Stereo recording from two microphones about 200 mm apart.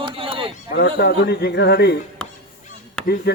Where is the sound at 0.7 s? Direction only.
55° left (ahead or behind).